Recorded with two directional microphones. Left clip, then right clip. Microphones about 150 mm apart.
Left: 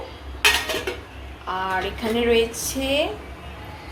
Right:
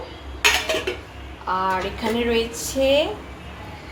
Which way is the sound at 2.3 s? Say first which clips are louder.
Left 2 dB; 15° right (ahead or behind).